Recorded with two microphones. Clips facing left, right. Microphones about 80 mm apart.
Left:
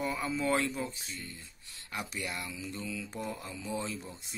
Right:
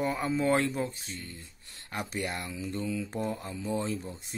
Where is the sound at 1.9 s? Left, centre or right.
Right.